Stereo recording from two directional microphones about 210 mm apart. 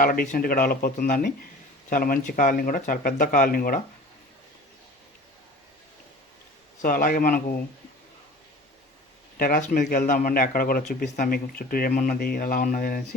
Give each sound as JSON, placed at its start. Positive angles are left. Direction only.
{"t": 0.0, "sound": "speech", "side_deg": 40}
{"t": 6.8, "sound": "speech", "side_deg": 45}
{"t": 9.4, "sound": "speech", "side_deg": 40}